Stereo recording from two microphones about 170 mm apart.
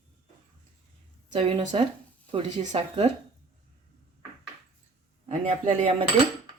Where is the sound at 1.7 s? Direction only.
35° right (ahead or behind).